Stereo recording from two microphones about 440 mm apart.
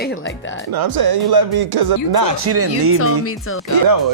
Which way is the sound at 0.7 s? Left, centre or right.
Right.